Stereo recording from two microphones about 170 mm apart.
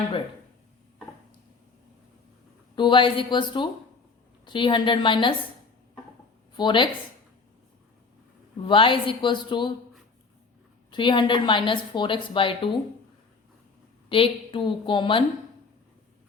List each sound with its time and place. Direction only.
2.7 s a woman's voice: 30° left (ahead or behind)
6.5 s speech: 25° left (ahead or behind)
8.6 s a woman's voice: 30° left (ahead or behind)
10.9 s a woman's voice: 30° left (ahead or behind)
14.1 s a woman's voice: 30° left (ahead or behind)